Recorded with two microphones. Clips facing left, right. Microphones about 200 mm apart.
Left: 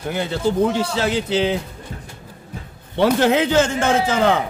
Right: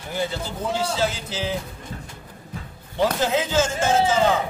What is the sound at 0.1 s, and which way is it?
A man's voice, 65° left (ahead or behind).